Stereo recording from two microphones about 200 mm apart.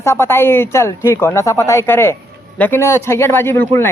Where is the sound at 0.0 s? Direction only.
10° left (ahead or behind).